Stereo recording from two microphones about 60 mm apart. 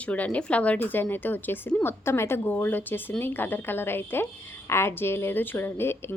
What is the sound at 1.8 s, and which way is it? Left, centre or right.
Speech, left.